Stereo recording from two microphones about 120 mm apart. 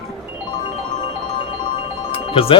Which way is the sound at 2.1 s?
50° left (ahead or behind).